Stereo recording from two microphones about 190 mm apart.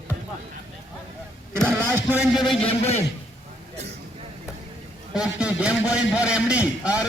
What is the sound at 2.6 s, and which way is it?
Speech, 35° left (ahead or behind).